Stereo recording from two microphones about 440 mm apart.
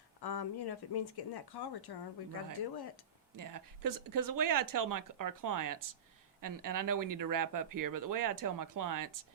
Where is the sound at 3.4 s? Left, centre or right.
Right.